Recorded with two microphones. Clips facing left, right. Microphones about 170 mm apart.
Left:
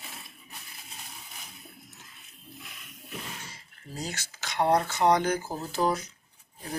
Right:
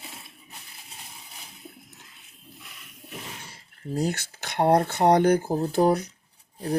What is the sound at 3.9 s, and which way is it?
Speech, 60° right (ahead or behind).